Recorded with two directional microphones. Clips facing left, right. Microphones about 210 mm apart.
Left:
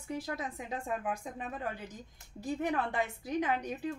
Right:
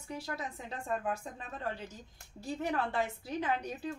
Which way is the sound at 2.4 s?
15° left (ahead or behind).